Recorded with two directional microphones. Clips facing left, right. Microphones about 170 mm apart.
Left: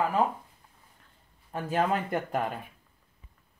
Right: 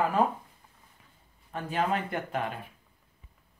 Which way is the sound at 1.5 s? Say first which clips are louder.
Left 2 dB; 40° left (ahead or behind).